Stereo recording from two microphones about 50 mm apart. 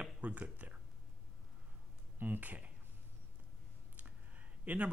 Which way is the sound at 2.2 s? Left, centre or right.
Right.